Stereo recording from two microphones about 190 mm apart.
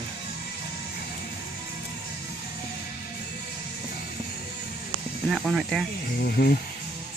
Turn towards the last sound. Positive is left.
turn(degrees=55)  # may be behind; listen again after turning